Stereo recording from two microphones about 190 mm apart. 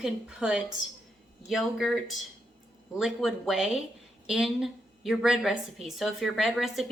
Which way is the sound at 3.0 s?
Centre (ahead or behind).